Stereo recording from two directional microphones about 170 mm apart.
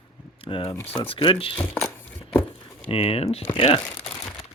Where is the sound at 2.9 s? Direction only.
35° left (ahead or behind).